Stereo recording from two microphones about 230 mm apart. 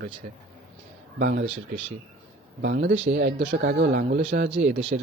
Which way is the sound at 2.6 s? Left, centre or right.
Right.